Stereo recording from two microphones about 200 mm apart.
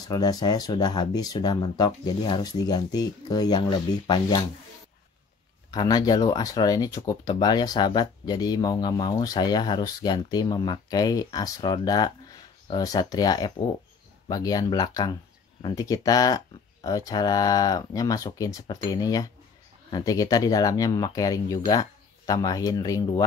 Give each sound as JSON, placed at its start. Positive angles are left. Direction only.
{"t": 0.0, "sound": "speech", "side_deg": 20}
{"t": 5.7, "sound": "speech", "side_deg": 20}